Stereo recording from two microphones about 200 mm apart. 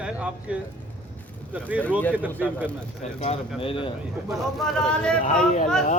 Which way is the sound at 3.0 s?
35° left (ahead or behind).